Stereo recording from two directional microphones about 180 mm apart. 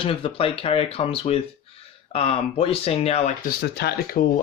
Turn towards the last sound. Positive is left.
turn(degrees=60)  # may be behind; listen again after turning